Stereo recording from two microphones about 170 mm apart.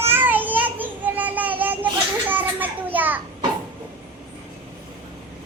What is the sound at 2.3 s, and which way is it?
Children playing, 10° right (ahead or behind).